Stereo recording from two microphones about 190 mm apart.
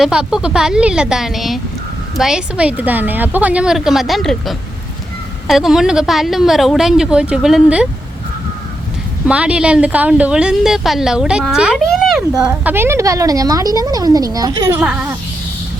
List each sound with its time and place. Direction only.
0.0 s a woman's voice: 5° right (ahead or behind)
9.2 s a woman's voice: 5° right (ahead or behind)
12.5 s speech: 10° right (ahead or behind)
14.8 s a woman's voice: 5° right (ahead or behind)